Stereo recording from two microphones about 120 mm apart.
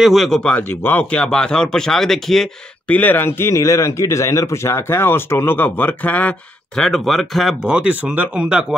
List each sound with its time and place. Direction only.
0.0 s speech: centre (ahead or behind)
3.0 s a man's voice: 15° left (ahead or behind); by 8.7 s 5° right (ahead or behind)